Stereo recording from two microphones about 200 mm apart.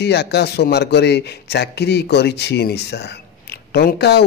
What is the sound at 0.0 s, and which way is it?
A man's voice, 55° left (ahead or behind).